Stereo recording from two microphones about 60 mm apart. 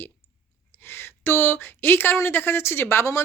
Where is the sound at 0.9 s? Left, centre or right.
Left.